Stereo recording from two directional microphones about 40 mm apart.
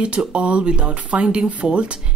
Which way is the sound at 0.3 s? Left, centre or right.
Right.